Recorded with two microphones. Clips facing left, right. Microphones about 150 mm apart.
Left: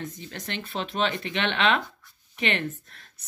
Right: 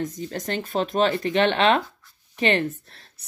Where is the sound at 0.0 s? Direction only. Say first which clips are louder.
Right 8 dB; 40° right (ahead or behind).